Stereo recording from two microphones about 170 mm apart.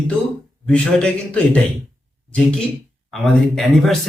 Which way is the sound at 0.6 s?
5° left (ahead or behind).